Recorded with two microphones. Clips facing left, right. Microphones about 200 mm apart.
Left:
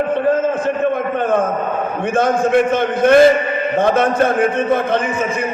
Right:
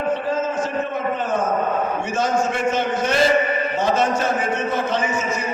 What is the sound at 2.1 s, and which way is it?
A man's voice, 55° left (ahead or behind).